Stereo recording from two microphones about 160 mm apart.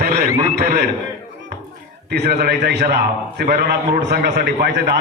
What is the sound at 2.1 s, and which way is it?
A man's voice, 90° right.